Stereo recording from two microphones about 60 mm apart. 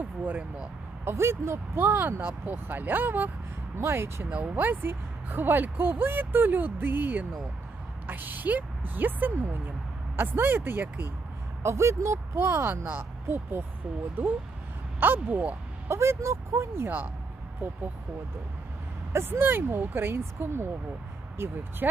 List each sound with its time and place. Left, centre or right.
0.3 s speech: right
1.0 s speech: right
3.8 s speech: right
4.3 s speech: right
11.6 s speech: right
15.0 s speech: right
15.9 s speech: right
16.8 s speech: right
19.1 s speech: right